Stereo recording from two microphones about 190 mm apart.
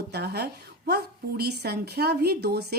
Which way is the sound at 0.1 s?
60° right (ahead or behind).